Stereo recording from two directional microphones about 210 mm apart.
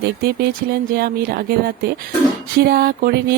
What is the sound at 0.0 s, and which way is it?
Speech, 50° right (ahead or behind).